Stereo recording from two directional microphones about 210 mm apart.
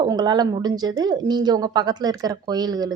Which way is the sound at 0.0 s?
20° right (ahead or behind).